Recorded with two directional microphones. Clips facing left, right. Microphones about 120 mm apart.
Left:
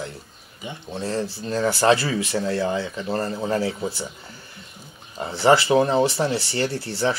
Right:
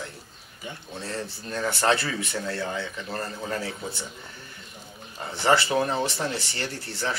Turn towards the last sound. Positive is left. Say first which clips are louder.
# left 7 dB
turn(degrees=30)  # may be behind; listen again after turning